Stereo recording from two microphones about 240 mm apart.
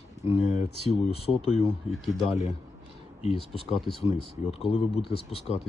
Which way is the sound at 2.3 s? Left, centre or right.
Left.